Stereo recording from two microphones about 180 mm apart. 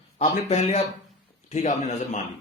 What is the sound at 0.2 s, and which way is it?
Speech, 35° left (ahead or behind).